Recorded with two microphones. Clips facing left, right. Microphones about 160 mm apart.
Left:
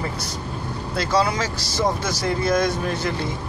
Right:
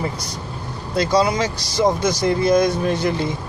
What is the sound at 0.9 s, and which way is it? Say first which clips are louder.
Speech: right 4 dB; 15° right (ahead or behind).